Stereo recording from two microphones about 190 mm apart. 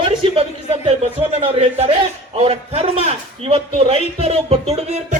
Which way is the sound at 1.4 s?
30° right (ahead or behind).